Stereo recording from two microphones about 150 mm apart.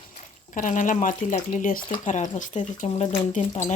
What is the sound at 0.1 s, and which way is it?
Speech, 60° left (ahead or behind).